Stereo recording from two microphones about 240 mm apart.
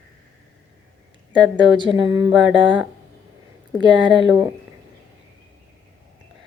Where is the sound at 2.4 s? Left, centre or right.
Right.